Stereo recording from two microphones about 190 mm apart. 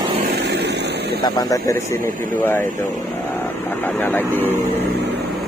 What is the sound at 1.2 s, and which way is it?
Speech, 20° left (ahead or behind).